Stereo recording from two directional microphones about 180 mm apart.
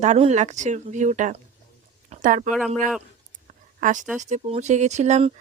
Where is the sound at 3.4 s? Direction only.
45° right (ahead or behind).